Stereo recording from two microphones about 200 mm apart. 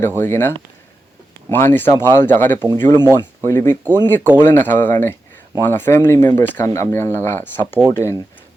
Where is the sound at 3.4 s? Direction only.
15° left (ahead or behind).